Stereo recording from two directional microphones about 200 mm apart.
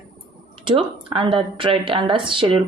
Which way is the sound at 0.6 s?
25° right (ahead or behind).